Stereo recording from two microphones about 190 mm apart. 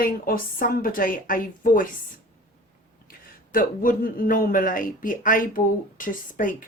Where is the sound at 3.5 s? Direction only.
50° left (ahead or behind).